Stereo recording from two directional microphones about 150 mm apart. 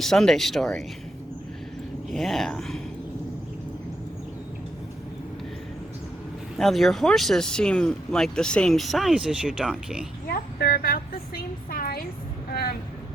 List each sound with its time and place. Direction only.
0.0 s speech: 5° left (ahead or behind)
2.1 s speech: centre (ahead or behind)
6.6 s speech: centre (ahead or behind)
10.2 s a woman's voice: 80° left